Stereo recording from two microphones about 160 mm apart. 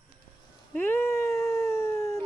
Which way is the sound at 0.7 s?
15° left (ahead or behind).